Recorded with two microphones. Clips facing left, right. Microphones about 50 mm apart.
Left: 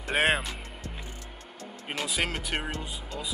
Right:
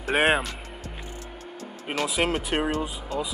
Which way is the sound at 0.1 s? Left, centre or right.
Centre.